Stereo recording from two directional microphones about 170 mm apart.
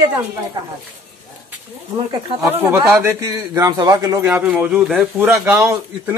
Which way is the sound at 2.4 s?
15° right (ahead or behind).